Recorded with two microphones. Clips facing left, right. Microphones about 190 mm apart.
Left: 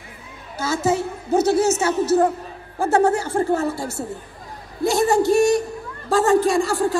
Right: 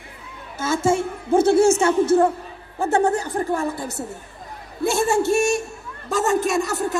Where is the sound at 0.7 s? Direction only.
25° right (ahead or behind).